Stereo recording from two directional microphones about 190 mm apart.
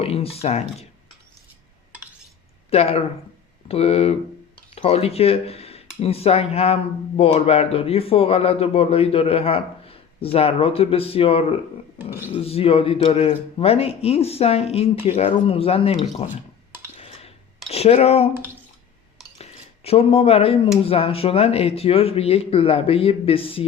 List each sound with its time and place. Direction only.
0.0 s a man's voice: 30° left (ahead or behind)
2.6 s a man's voice: 35° left (ahead or behind)
17.0 s a sound: 30° left (ahead or behind)
17.7 s speech: 35° left (ahead or behind)
19.4 s a sound: 30° left (ahead or behind)
20.8 s a man's voice: 30° left (ahead or behind)